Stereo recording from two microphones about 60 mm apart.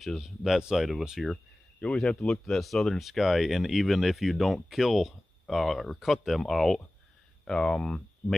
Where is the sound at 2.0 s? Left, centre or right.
Centre.